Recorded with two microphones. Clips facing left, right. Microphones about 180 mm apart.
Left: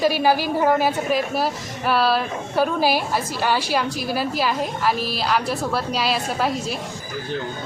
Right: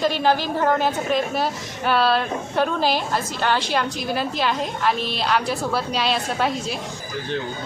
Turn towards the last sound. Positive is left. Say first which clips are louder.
# even
turn(degrees=0)  # may be behind; listen again after turning